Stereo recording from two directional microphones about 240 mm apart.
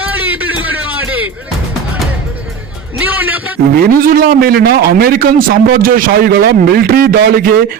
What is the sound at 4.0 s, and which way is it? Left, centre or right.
A man's voice, right.